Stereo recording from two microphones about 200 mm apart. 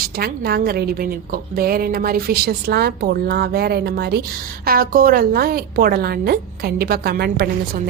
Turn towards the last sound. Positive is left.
turn(degrees=-50)  # may be behind; listen again after turning